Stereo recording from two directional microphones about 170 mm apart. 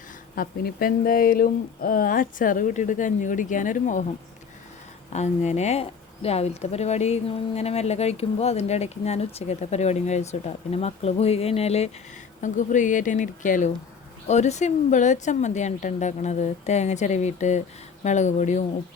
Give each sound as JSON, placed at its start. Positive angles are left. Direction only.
{"t": 0.3, "sound": "speech", "side_deg": 60}
{"t": 5.1, "sound": "speech", "side_deg": 45}